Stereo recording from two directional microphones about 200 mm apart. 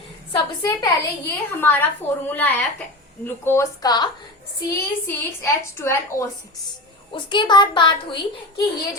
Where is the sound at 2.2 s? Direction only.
10° left (ahead or behind).